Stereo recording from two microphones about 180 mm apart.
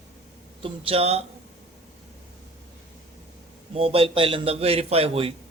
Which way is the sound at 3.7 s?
30° right (ahead or behind).